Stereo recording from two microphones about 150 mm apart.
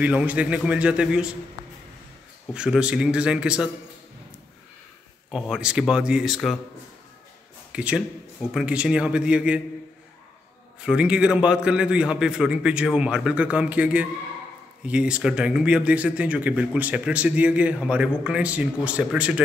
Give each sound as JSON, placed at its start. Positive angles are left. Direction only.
{"t": 0.0, "sound": "speech", "side_deg": -10}
{"t": 2.5, "sound": "speech", "side_deg": -5}
{"t": 5.3, "sound": "speech", "side_deg": -5}
{"t": 7.7, "sound": "a man's voice", "side_deg": -10}
{"t": 10.8, "sound": "speech", "side_deg": -5}